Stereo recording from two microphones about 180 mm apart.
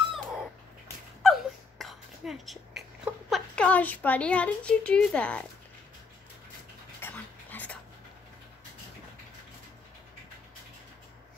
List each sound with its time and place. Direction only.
0.1 s cat: centre (ahead or behind)
1.2 s a sound: centre (ahead or behind)
7.0 s dog: 10° left (ahead or behind)